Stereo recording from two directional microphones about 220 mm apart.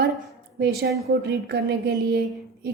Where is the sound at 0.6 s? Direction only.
45° right (ahead or behind).